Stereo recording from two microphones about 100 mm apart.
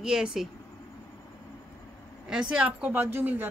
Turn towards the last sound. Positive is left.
turn(degrees=-20)  # may be behind; listen again after turning